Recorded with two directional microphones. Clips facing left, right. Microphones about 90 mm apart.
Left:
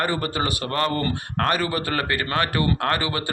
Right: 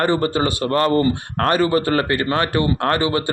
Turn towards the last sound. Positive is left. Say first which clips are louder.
# right 5 dB
turn(degrees=-25)  # may be behind; listen again after turning